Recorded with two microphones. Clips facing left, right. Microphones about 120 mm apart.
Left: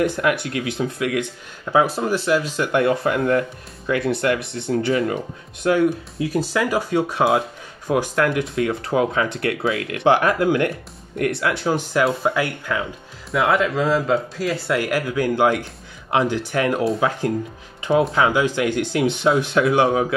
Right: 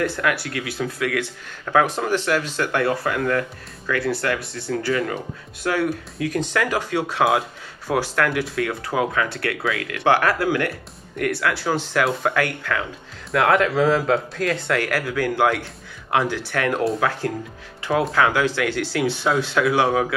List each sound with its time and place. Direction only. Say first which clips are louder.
0.0 s speech: left 3 dB; 20° left (ahead or behind)
18.1 s speech: left 1 dB; 20° left (ahead or behind)